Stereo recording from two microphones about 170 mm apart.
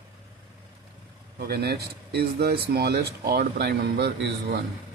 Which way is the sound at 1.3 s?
70° right (ahead or behind).